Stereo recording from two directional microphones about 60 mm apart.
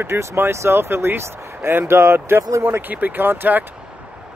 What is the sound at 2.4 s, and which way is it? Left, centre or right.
Speech, right.